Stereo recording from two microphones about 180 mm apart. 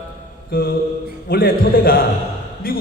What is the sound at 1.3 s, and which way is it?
A man's voice, 55° left (ahead or behind).